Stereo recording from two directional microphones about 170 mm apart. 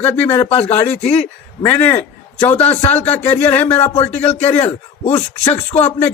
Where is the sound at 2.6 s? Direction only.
35° left (ahead or behind).